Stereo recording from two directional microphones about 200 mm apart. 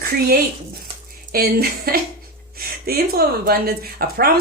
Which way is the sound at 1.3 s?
50° right (ahead or behind).